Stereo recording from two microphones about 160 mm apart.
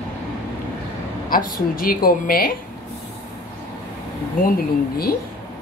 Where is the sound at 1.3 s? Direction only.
60° left (ahead or behind).